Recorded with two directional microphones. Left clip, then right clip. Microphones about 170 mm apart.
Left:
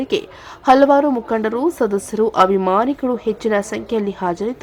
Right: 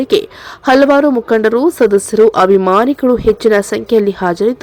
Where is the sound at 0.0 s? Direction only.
30° right (ahead or behind).